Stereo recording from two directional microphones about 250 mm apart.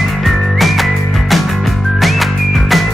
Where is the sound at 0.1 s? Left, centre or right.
Centre.